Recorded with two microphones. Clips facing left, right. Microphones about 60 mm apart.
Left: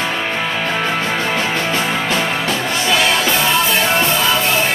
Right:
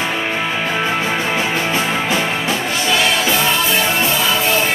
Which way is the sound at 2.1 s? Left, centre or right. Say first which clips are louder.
Even; centre.